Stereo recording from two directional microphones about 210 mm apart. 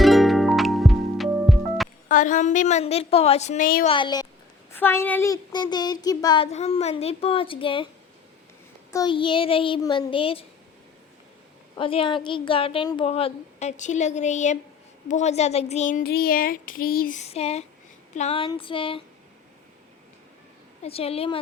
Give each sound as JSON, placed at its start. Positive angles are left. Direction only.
{"t": 0.0, "sound": "music", "side_deg": 0}
{"t": 2.0, "sound": "a sound", "side_deg": 35}
{"t": 3.8, "sound": "speech", "side_deg": 20}
{"t": 8.9, "sound": "speech", "side_deg": 20}
{"t": 11.8, "sound": "speech", "side_deg": 25}
{"t": 15.0, "sound": "a sound", "side_deg": 35}
{"t": 18.1, "sound": "speech", "side_deg": 30}
{"t": 20.8, "sound": "speech", "side_deg": 30}